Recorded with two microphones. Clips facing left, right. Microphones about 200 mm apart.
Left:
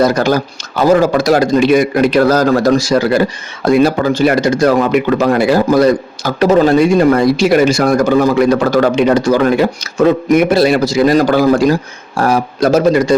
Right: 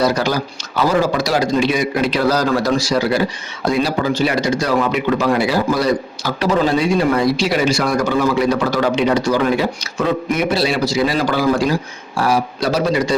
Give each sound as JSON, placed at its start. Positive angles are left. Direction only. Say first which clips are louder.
{"t": 0.0, "sound": "a man's voice", "louder": "left 5 dB", "side_deg": 50}